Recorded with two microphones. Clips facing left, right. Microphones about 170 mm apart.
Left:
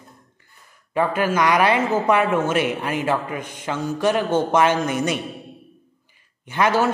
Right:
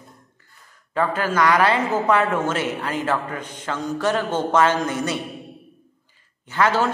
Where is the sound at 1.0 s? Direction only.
15° left (ahead or behind).